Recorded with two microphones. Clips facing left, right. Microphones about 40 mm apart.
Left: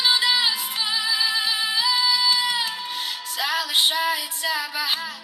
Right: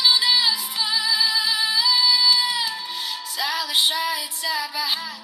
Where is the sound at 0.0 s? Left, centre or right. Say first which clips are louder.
Right 1 dB; left.